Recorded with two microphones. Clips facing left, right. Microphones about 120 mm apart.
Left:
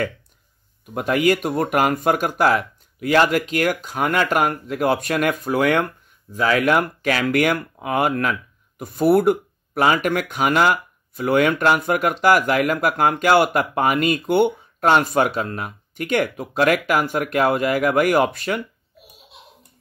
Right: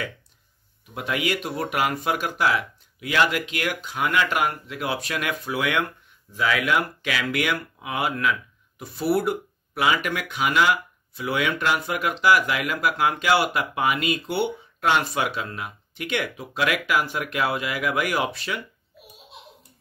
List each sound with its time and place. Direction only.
0.9 s speech: 45° left (ahead or behind)